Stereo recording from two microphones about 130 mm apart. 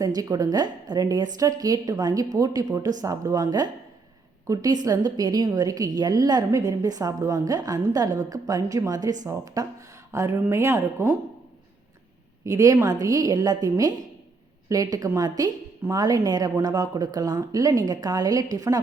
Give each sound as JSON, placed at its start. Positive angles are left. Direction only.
{"t": 0.0, "sound": "a woman's voice", "side_deg": -25}
{"t": 12.5, "sound": "a woman's voice", "side_deg": -25}